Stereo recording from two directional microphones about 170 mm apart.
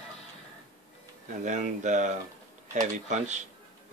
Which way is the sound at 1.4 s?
45° right (ahead or behind).